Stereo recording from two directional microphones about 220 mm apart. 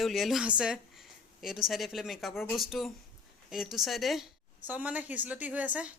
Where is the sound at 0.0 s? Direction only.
Centre (ahead or behind).